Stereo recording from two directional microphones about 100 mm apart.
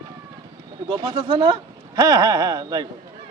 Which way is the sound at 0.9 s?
60° right (ahead or behind).